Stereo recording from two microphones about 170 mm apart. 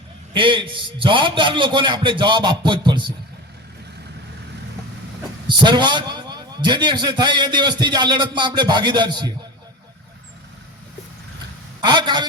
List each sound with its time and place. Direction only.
0.3 s a man's voice: 30° right (ahead or behind)
5.5 s a man's voice: 25° right (ahead or behind)
11.8 s a man's voice: 25° right (ahead or behind)